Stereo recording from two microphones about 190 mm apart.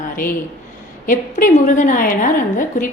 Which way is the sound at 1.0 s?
45° left (ahead or behind).